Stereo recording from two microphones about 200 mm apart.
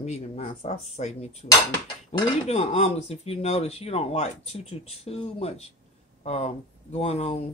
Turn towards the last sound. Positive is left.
turn(degrees=30)  # may be behind; listen again after turning